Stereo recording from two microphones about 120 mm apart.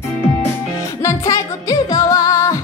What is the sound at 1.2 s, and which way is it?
Music, 30° left (ahead or behind).